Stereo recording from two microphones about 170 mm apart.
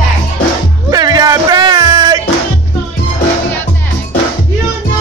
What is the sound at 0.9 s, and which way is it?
Music, 25° right (ahead or behind).